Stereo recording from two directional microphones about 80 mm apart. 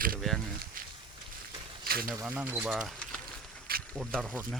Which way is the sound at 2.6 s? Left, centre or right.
Centre.